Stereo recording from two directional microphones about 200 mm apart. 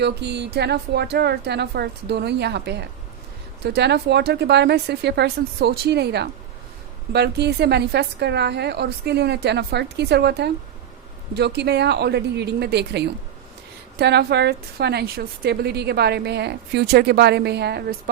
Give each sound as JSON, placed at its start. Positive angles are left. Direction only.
{"t": 0.0, "sound": "a woman's voice", "side_deg": -55}